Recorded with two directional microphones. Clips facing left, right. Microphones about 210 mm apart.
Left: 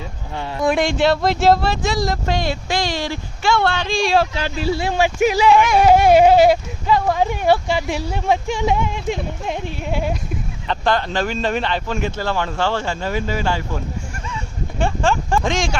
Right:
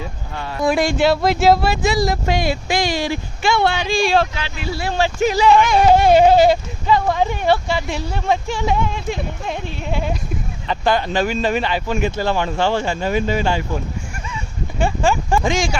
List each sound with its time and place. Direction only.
0.6 s speech: centre (ahead or behind)
4.4 s speech: 40° left (ahead or behind)
4.7 s speech: 20° left (ahead or behind)
10.7 s speech: 10° right (ahead or behind)
14.3 s a sound: 5° right (ahead or behind)